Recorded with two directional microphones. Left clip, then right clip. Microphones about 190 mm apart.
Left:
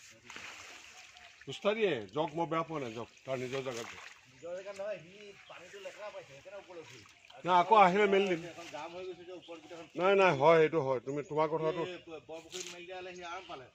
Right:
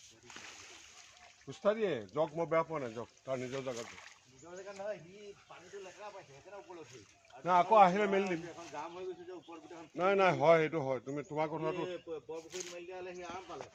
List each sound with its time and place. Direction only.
1.5 s speech: 50° left (ahead or behind)
7.4 s speech: 45° left (ahead or behind)
9.9 s speech: 35° left (ahead or behind)